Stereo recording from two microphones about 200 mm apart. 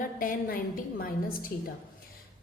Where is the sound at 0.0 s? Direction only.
45° left (ahead or behind).